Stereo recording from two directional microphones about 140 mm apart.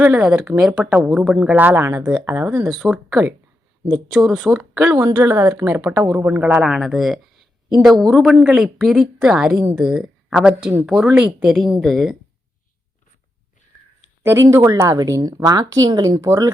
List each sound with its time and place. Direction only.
0.0 s speech: 10° right (ahead or behind)
2.6 s a woman's voice: centre (ahead or behind)
4.9 s a woman's voice: 20° right (ahead or behind); by 12.1 s centre (ahead or behind)
14.3 s a woman's voice: 20° right (ahead or behind)